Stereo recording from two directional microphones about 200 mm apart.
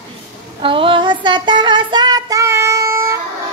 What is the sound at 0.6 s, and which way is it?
Child singing, 25° right (ahead or behind).